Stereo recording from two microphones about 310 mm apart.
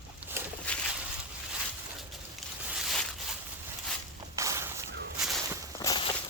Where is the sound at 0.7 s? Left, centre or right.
Centre.